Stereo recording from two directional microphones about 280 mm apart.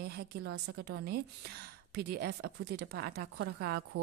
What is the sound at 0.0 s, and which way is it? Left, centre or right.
A woman's voice, right.